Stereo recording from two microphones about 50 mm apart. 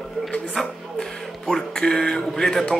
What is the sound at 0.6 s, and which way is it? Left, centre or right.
Speech, centre.